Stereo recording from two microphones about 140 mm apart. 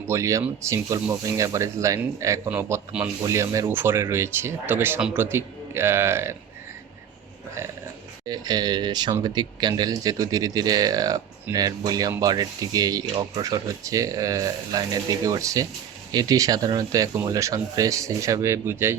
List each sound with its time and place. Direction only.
0.1 s speech: 20° right (ahead or behind)
8.3 s speech: 30° right (ahead or behind)